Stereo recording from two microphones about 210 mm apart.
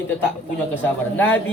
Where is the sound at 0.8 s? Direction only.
10° left (ahead or behind).